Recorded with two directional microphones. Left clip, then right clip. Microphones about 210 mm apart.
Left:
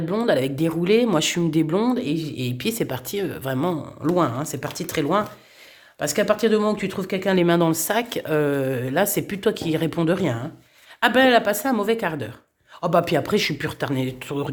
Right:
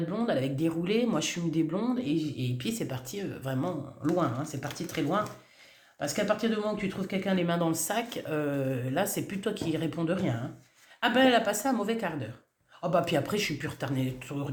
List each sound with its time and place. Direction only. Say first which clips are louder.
0.1 s speech: left 11 dB; 50° left (ahead or behind)